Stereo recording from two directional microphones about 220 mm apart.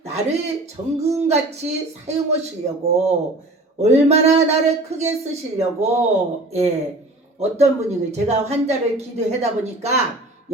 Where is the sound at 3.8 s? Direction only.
30° right (ahead or behind).